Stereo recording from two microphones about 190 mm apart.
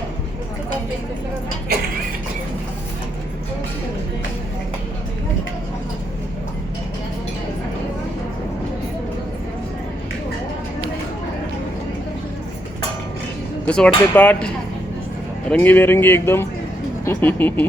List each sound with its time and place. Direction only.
1.7 s mechanisms: 55° right (ahead or behind)
13.7 s speech: 5° left (ahead or behind)